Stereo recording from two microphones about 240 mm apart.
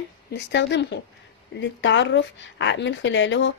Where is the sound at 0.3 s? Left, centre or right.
Left.